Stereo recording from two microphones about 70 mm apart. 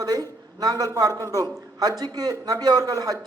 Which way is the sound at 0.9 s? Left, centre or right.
Right.